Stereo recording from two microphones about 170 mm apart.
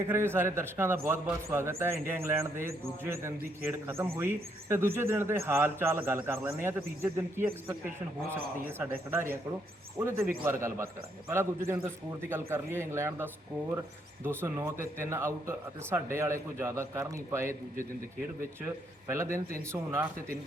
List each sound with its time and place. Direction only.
0.1 s a man's voice: 15° right (ahead or behind)
10.0 s a man's voice: 15° right (ahead or behind)
18.6 s a man's voice: 15° right (ahead or behind)